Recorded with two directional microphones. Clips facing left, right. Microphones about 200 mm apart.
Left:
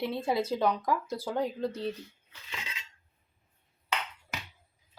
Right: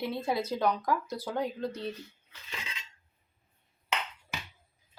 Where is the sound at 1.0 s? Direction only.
30° left (ahead or behind).